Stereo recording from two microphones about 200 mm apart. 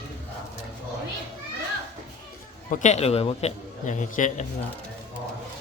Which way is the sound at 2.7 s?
40° left (ahead or behind).